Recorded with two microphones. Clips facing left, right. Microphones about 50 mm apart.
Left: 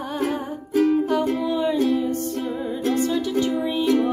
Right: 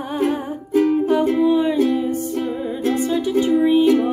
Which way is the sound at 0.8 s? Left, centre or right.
Centre.